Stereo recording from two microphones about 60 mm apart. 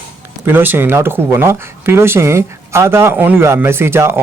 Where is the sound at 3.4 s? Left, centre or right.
Right.